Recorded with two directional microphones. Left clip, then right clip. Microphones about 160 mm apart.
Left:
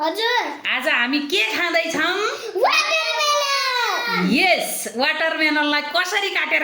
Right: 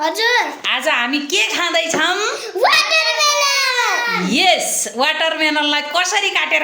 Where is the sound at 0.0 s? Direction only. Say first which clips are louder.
Right 4 dB; 5° left (ahead or behind).